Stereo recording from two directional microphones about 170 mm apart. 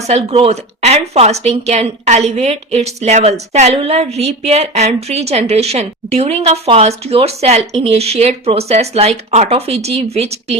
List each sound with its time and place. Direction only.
0.1 s speech: 35° right (ahead or behind)